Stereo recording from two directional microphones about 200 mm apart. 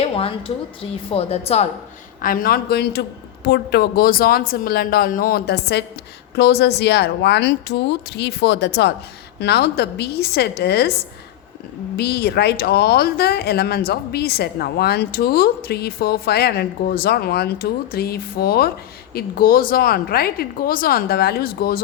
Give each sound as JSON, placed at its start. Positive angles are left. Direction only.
{"t": 0.0, "sound": "a woman's voice", "side_deg": 30}
{"t": 2.2, "sound": "a woman's voice", "side_deg": 45}
{"t": 11.9, "sound": "speech", "side_deg": 50}